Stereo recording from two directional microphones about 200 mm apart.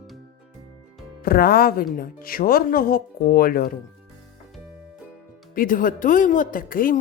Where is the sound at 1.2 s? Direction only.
50° left (ahead or behind).